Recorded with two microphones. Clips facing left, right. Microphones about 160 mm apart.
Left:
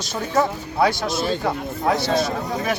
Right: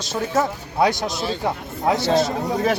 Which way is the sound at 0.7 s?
20° right (ahead or behind).